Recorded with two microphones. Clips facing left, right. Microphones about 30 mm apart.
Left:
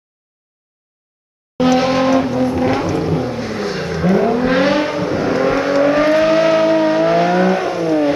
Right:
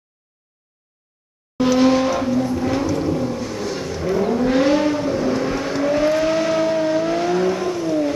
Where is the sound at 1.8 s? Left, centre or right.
Left.